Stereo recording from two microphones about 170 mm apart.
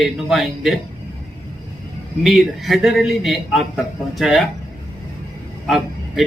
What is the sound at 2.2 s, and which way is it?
A man's voice, centre (ahead or behind).